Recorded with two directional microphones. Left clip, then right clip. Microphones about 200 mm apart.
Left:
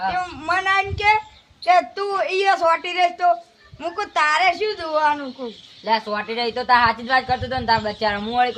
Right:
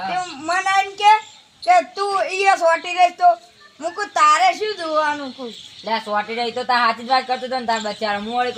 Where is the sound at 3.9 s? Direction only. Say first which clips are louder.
Right 4 dB; 35° left (ahead or behind).